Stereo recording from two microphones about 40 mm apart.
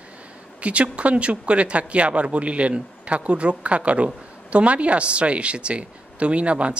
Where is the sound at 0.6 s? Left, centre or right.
Right.